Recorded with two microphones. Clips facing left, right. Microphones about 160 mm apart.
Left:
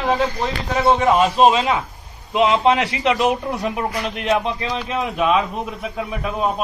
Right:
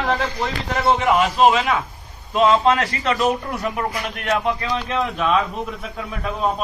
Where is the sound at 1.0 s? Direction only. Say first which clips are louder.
Left 1 dB; 25° left (ahead or behind).